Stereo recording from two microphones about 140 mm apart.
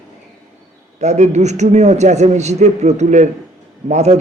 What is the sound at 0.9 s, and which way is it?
A man's voice, 55° right (ahead or behind).